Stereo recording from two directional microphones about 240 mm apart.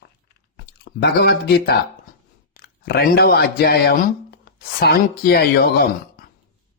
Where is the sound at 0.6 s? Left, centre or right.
Left.